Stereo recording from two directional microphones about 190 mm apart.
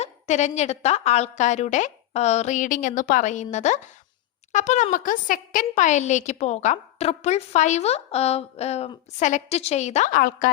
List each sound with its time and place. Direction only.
0.0 s a woman's voice: 35° left (ahead or behind)